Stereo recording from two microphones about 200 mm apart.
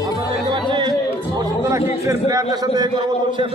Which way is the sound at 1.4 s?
15° right (ahead or behind).